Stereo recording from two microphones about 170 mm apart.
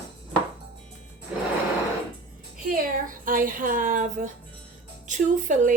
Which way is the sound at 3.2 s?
55° right (ahead or behind).